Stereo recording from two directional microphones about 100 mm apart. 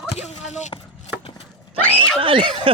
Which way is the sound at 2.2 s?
60° right (ahead or behind).